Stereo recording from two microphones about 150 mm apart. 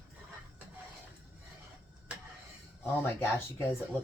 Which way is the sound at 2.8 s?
15° left (ahead or behind).